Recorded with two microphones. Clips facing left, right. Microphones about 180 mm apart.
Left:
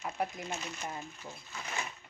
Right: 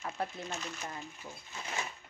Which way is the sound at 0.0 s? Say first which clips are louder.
Left 2 dB; 15° left (ahead or behind).